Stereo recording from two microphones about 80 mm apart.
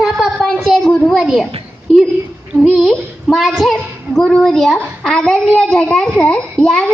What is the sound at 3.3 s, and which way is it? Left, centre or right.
A child's voice, centre.